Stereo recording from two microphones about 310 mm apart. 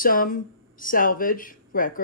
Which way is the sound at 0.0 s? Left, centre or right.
Left.